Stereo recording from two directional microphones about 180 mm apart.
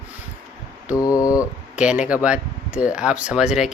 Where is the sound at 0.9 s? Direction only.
20° left (ahead or behind).